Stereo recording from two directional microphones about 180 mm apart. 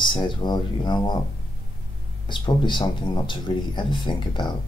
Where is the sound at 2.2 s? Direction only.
25° left (ahead or behind).